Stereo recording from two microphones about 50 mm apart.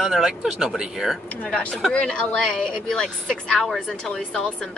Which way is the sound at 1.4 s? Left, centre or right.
Left.